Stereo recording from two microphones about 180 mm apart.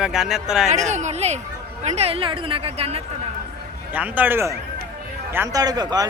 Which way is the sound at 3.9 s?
10° right (ahead or behind).